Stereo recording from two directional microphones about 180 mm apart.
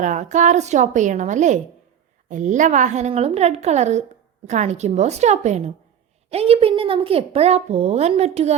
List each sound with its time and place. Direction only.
0.0 s a woman's voice: 45° right (ahead or behind)